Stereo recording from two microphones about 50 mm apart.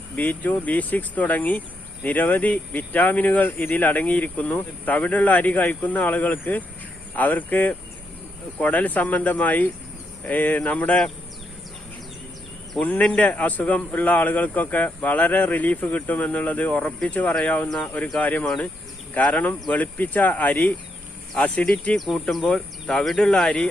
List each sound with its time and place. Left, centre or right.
0.2 s speech: left
12.8 s speech: left
22.5 s speech: centre